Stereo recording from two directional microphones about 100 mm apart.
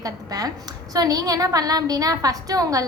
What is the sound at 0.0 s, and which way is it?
A woman's voice, 35° right (ahead or behind).